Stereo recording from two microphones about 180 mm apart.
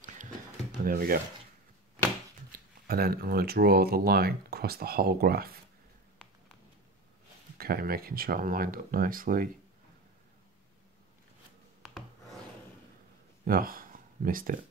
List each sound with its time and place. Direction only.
0.8 s speech: 55° right (ahead or behind)
2.5 s speech: 55° right (ahead or behind)
7.5 s speech: 55° right (ahead or behind)
13.5 s speech: 50° right (ahead or behind)